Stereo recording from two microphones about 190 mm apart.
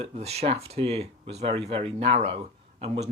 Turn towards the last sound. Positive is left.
turn(degrees=-30)  # may be behind; listen again after turning